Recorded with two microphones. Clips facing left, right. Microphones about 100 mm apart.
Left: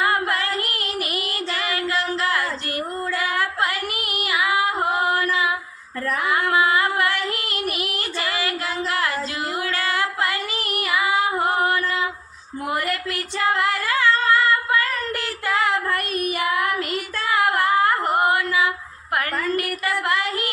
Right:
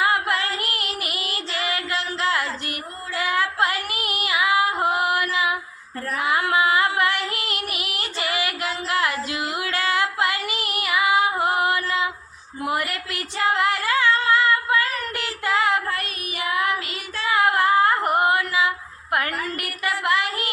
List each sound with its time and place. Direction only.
0.0 s child singing: 20° right (ahead or behind)
3.2 s female singing: 20° right (ahead or behind)
8.9 s a sound: 20° right (ahead or behind)
9.6 s female singing: 20° right (ahead or behind)
16.0 s child singing: 45° left (ahead or behind)
17.3 s humming: 20° right (ahead or behind)
18.2 s a sound: 20° right (ahead or behind)